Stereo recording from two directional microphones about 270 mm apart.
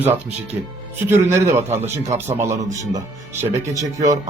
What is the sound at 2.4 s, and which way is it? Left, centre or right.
Speech, right.